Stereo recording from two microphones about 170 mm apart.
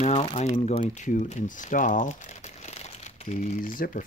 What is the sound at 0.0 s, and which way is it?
Speech, 40° left (ahead or behind).